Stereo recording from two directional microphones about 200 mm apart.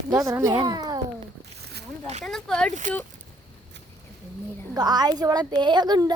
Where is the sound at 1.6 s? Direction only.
55° right (ahead or behind).